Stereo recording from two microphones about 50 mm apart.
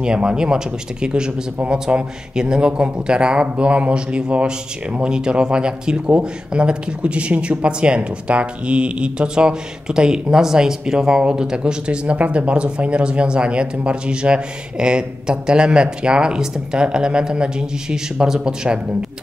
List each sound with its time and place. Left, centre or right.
0.0 s speech: centre